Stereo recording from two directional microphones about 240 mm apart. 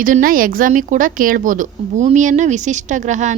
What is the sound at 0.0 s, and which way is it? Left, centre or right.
A woman's voice, right.